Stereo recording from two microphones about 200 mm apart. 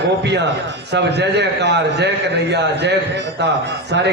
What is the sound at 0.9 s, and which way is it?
A man's voice, 60° right (ahead or behind).